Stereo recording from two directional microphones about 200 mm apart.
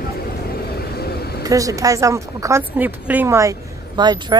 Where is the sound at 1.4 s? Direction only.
15° right (ahead or behind).